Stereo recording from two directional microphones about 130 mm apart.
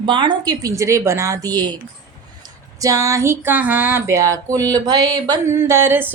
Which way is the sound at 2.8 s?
25° right (ahead or behind).